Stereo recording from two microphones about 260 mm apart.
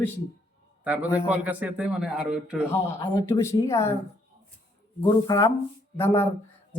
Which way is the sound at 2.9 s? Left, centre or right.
Centre.